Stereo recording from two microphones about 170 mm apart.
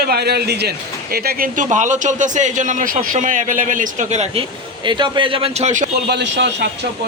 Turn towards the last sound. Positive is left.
turn(degrees=-90)